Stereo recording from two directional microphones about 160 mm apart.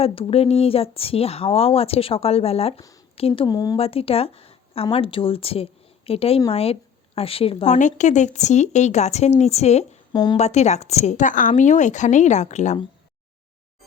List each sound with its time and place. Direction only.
0.0 s speech: 35° left (ahead or behind)
3.8 s speech: 35° left (ahead or behind)
7.8 s speech: 50° left (ahead or behind)
10.1 s speech: 30° left (ahead or behind)
10.3 s speech: 45° left (ahead or behind)